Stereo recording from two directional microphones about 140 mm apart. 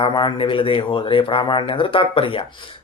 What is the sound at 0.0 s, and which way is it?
Speech, 35° left (ahead or behind).